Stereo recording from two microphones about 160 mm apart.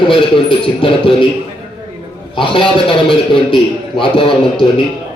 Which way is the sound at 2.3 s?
30° left (ahead or behind).